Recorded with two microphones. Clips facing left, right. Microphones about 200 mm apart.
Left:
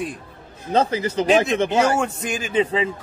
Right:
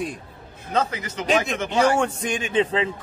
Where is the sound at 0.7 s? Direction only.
35° left (ahead or behind).